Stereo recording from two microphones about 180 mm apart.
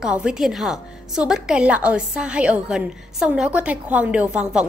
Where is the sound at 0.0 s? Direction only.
5° right (ahead or behind).